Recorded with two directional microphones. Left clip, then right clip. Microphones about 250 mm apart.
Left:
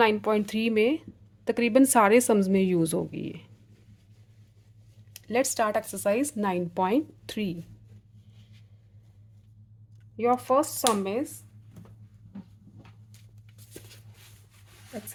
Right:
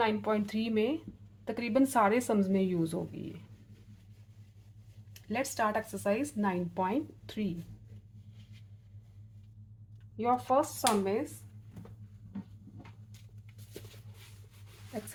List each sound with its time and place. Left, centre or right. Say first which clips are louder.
0.0 s speech: left 7 dB; left
5.1 s speech: left 8 dB; left
10.2 s speech: left 5 dB; left